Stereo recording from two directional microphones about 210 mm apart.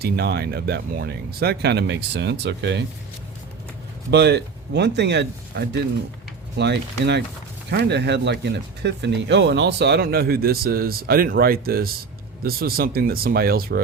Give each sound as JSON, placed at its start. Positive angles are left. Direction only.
{"t": 0.0, "sound": "speech", "side_deg": -50}
{"t": 4.1, "sound": "speech", "side_deg": -55}